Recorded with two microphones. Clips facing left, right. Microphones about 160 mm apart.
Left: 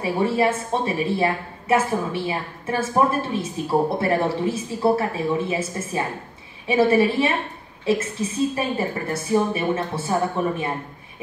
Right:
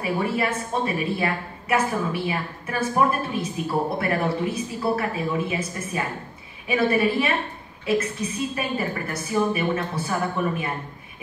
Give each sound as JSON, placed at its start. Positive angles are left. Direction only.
{"t": 0.0, "sound": "a woman's voice", "side_deg": 30}